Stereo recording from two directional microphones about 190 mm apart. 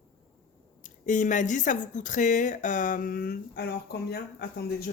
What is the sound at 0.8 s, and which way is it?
Speech, 40° left (ahead or behind).